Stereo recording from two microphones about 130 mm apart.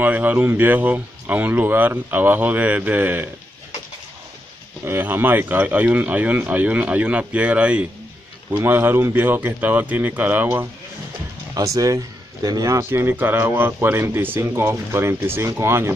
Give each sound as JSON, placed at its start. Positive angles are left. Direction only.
{"t": 0.0, "sound": "speech", "side_deg": -15}
{"t": 4.8, "sound": "speech", "side_deg": -15}